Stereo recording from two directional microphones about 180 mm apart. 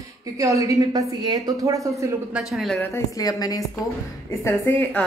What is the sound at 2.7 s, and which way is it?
A woman's voice, 15° left (ahead or behind).